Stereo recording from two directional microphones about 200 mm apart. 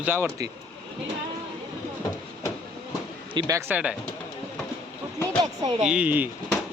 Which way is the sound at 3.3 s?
20° right (ahead or behind).